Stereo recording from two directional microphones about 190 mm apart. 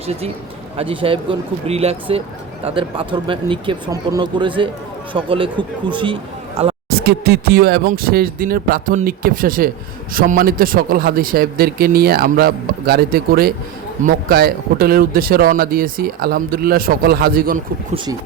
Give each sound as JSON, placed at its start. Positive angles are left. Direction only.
{"t": 0.8, "sound": "speech", "side_deg": -30}
{"t": 6.9, "sound": "speech", "side_deg": -55}
{"t": 17.9, "sound": "speech", "side_deg": -25}